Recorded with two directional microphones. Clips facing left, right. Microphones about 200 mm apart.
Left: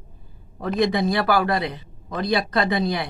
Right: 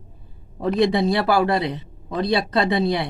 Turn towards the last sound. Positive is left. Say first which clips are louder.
# right 2 dB
turn(degrees=-25)  # may be behind; listen again after turning